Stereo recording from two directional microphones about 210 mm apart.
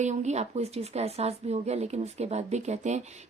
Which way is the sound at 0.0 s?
35° right (ahead or behind).